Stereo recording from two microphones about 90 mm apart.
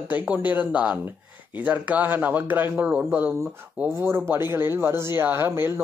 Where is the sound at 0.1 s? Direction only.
20° right (ahead or behind).